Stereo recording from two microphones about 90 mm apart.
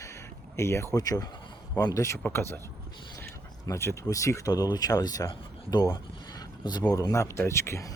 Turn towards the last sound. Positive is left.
turn(degrees=30)  # may be behind; listen again after turning